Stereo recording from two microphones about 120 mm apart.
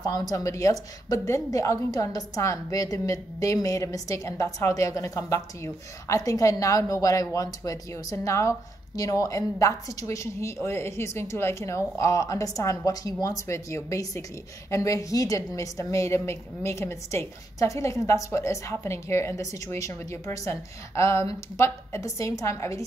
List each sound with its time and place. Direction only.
0.0 s a woman's voice: 35° left (ahead or behind)